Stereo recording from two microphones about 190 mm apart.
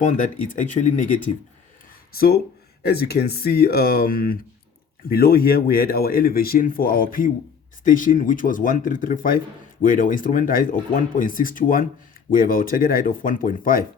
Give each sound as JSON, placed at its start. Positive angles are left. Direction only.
{"t": 0.0, "sound": "speech", "side_deg": 40}
{"t": 2.1, "sound": "speech", "side_deg": 55}